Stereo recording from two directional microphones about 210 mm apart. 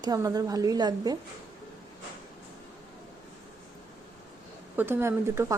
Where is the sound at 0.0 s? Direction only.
15° right (ahead or behind).